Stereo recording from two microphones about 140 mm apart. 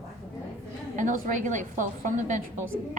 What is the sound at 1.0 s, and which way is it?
A woman's voice, 65° right (ahead or behind).